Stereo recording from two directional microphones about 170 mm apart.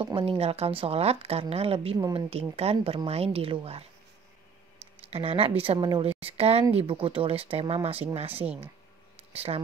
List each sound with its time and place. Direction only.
0.0 s speech: 30° right (ahead or behind)
2.0 s a woman's voice: 25° right (ahead or behind)
2.5 s speech: 35° right (ahead or behind)
5.1 s speech: 35° right (ahead or behind)
8.4 s speech: 10° right (ahead or behind)
9.3 s speech: 35° right (ahead or behind)